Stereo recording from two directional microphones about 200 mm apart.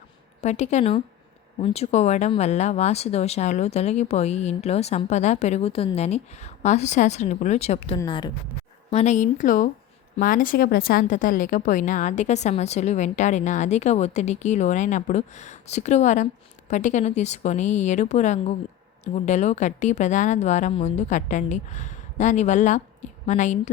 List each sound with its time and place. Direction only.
0.4 s a woman's voice: 35° left (ahead or behind)
8.9 s a woman's voice: 35° left (ahead or behind)